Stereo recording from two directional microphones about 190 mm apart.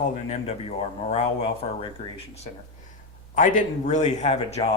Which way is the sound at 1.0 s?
35° left (ahead or behind).